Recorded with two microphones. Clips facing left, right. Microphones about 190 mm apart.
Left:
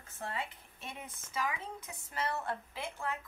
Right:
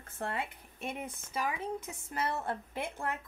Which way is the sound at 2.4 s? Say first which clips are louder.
Right 3 dB; 55° right (ahead or behind).